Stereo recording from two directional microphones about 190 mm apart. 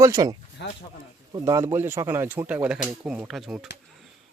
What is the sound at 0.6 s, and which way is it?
Speech, 60° left (ahead or behind).